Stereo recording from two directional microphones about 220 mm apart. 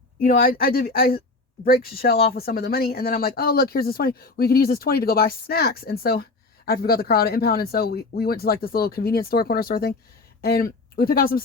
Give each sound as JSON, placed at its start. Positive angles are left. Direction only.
{"t": 0.2, "sound": "speech", "side_deg": 40}